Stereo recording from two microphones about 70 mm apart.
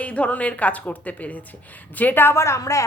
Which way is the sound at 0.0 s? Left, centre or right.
Centre.